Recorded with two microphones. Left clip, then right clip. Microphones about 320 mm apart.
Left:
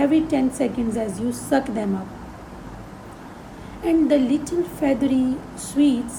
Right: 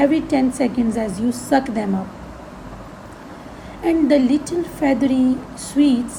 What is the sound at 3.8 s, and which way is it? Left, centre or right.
A woman's voice, centre.